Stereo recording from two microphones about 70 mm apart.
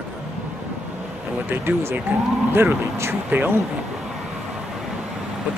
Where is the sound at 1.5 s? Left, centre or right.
Right.